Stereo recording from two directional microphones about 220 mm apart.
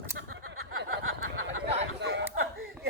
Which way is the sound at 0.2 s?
65° right (ahead or behind).